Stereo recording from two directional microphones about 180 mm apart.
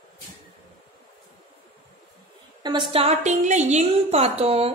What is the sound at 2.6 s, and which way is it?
A woman's voice, 25° right (ahead or behind).